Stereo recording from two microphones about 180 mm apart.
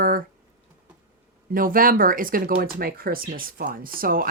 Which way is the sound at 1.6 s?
50° right (ahead or behind).